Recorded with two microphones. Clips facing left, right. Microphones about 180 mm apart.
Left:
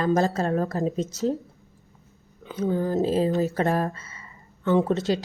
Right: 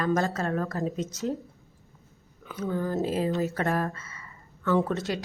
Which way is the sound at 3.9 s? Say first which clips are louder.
Even; 30° left (ahead or behind).